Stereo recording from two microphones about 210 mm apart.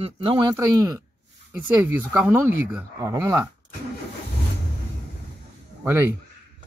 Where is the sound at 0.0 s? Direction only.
20° right (ahead or behind).